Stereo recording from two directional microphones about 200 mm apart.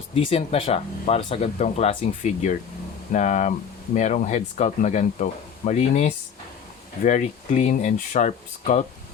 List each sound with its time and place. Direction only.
0.1 s speech: 30° left (ahead or behind)